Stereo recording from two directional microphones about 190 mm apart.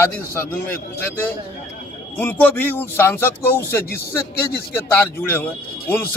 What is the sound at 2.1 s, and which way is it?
Speech, 10° left (ahead or behind).